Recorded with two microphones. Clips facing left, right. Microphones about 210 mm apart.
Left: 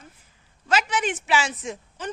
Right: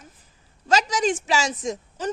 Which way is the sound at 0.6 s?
40° right (ahead or behind).